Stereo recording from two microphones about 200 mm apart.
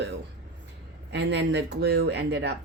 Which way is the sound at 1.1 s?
60° right (ahead or behind).